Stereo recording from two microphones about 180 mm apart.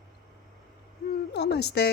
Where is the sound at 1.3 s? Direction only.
65° left (ahead or behind).